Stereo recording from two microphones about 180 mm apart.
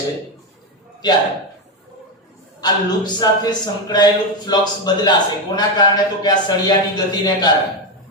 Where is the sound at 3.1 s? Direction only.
20° left (ahead or behind).